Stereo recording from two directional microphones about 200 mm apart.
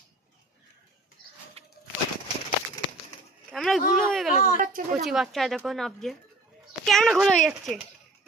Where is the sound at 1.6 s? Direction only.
30° right (ahead or behind).